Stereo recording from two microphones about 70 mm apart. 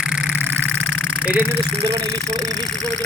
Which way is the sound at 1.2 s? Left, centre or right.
Right.